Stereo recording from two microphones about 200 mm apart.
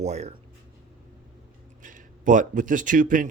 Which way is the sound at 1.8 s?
40° right (ahead or behind).